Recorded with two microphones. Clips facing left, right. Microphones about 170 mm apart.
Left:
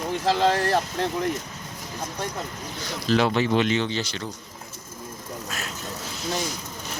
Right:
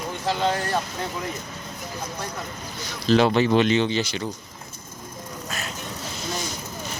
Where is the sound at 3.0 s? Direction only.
25° right (ahead or behind).